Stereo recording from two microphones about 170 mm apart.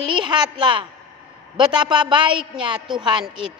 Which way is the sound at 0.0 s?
30° right (ahead or behind).